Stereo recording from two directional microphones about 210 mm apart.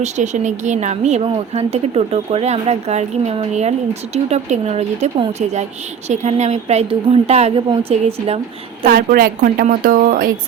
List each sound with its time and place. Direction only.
0.0 s a woman's voice: 35° right (ahead or behind)
8.8 s speech: 45° right (ahead or behind)